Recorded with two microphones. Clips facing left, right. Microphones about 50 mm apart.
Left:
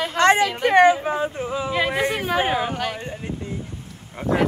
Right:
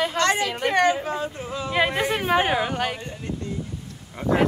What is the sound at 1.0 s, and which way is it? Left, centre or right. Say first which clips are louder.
Speech: left 4 dB; centre.